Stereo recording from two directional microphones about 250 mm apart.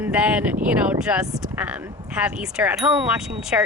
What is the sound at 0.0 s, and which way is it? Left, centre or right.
Speech, centre.